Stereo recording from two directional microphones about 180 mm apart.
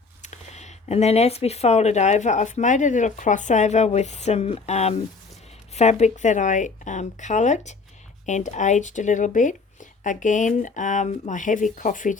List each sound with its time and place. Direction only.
0.2 s speech: 40° left (ahead or behind)